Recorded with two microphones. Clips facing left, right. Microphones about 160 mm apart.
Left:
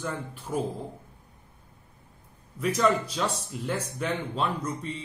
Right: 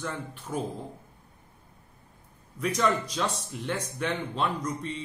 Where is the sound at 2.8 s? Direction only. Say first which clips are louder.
Left 2 dB; 10° left (ahead or behind).